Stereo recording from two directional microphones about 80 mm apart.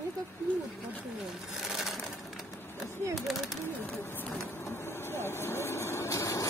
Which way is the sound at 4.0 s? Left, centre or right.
Left.